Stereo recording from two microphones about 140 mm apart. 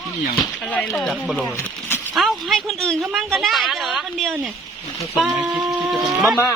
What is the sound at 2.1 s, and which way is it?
A woman's voice, centre (ahead or behind).